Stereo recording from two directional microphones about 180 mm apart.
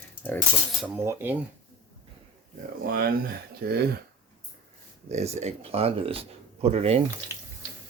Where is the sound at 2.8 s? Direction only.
55° right (ahead or behind).